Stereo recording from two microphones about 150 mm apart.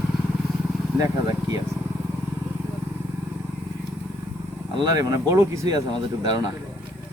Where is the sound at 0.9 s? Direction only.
25° right (ahead or behind).